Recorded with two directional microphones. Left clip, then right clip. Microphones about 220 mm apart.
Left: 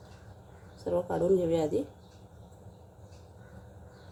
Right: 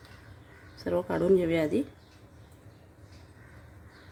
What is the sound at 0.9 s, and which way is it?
Speech, 70° right (ahead or behind).